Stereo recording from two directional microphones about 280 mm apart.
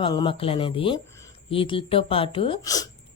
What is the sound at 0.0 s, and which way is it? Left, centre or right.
Speech, centre.